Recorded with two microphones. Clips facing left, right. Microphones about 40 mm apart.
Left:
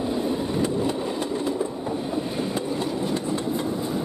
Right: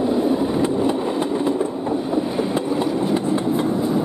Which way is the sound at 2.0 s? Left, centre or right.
Centre.